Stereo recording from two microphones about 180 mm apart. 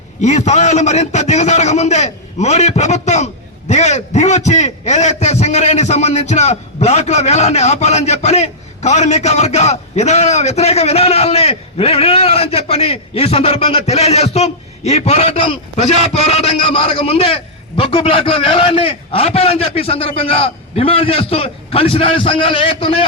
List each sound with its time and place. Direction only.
0.2 s a man's voice: 40° left (ahead or behind)